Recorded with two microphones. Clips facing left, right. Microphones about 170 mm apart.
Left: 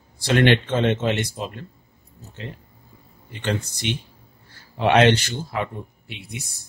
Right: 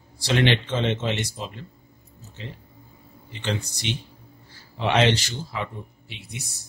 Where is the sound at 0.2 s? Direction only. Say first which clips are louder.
Left 4 dB; 50° left (ahead or behind).